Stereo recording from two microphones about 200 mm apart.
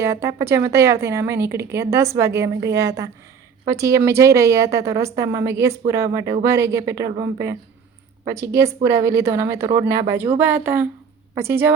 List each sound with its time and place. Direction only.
0.0 s speech: 15° right (ahead or behind)